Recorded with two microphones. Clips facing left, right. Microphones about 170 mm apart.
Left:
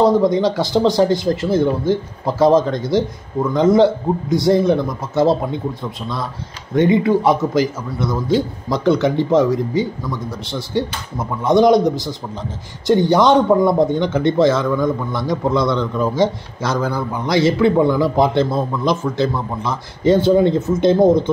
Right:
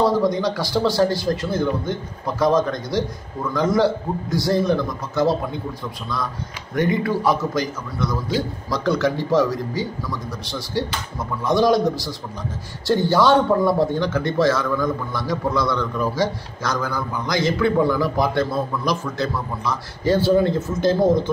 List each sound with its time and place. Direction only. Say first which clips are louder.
0.0 s a man's voice: left 5 dB; 25° left (ahead or behind)
6.7 s a man's voice: left 7 dB; 25° left (ahead or behind)